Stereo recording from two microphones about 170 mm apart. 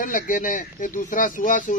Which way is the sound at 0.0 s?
50° left (ahead or behind).